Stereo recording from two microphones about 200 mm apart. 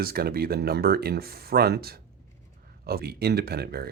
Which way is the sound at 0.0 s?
50° right (ahead or behind).